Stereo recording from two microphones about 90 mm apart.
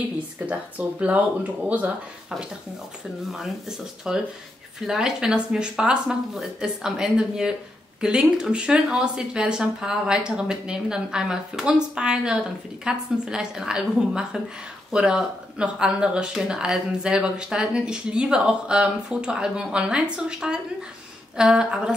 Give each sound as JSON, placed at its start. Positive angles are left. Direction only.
{"t": 0.5, "sound": "speech", "side_deg": -15}
{"t": 3.3, "sound": "speech", "side_deg": -5}